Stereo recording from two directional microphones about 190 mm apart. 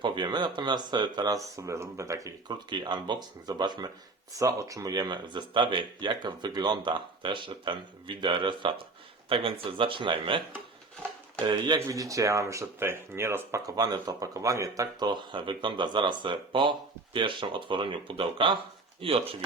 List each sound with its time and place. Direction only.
0.0 s speech: 25° right (ahead or behind)
11.4 s speech: 20° right (ahead or behind)